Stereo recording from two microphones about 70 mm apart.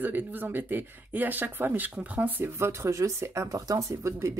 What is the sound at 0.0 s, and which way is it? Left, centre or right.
Speech, right.